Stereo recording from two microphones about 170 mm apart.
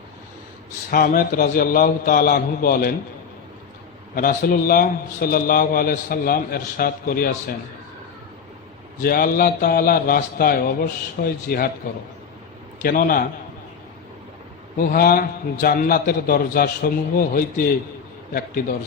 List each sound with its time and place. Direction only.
0.9 s a man's voice: 60° left (ahead or behind)
4.1 s a man's voice: 55° left (ahead or behind)
9.0 s a man's voice: 60° left (ahead or behind)
12.8 s a man's voice: 55° left (ahead or behind)
14.8 s a man's voice: 60° left (ahead or behind)